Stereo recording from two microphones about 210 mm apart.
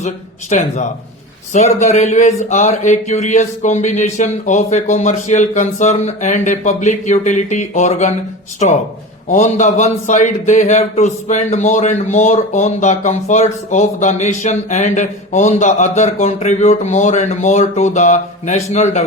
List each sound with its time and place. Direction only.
0.5 s a man's voice: 35° left (ahead or behind)